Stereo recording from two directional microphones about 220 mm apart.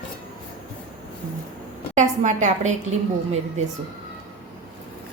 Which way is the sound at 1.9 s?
35° right (ahead or behind).